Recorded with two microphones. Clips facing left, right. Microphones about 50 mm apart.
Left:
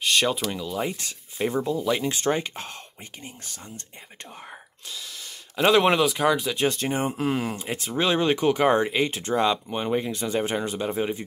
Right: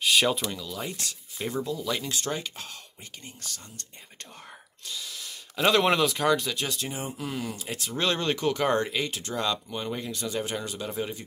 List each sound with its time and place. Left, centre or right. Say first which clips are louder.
0.0 s a sound: left 1 dB; centre
0.5 s speech: left 6 dB; left
3.2 s speech: left 1 dB; left
4.9 s speech: even; centre
6.5 s speech: left 8 dB; left
6.8 s speech: left 8 dB; left
7.6 s speech: left 1 dB; left